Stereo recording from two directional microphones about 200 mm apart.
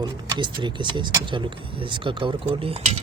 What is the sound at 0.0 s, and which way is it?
Speech, 20° right (ahead or behind).